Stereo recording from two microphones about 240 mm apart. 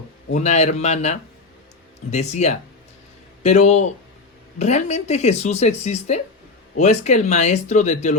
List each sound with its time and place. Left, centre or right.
0.3 s speech: left